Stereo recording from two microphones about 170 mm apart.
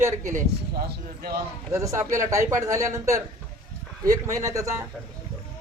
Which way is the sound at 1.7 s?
15° right (ahead or behind).